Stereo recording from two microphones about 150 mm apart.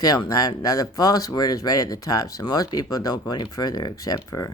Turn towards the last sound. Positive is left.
turn(degrees=25)  # may be behind; listen again after turning